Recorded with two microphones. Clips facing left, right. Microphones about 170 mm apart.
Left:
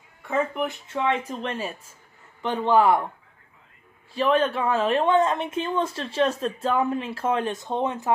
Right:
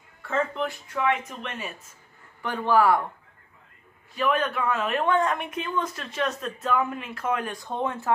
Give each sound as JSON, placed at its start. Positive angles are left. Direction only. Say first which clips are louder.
{"t": 0.3, "sound": "a woman's voice", "louder": "left 2 dB", "side_deg": 15}
{"t": 2.4, "sound": "a woman's voice", "louder": "left 2 dB", "side_deg": 20}
{"t": 4.1, "sound": "a woman's voice", "louder": "left 4 dB", "side_deg": 30}